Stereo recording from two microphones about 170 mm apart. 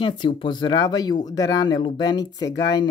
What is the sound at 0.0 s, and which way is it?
Speech, 30° left (ahead or behind).